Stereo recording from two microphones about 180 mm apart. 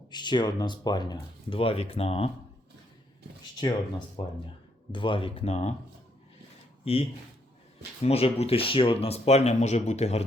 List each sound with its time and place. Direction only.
0.1 s speech: 25° left (ahead or behind)
3.6 s speech: 25° left (ahead or behind)
6.8 s speech: 30° left (ahead or behind)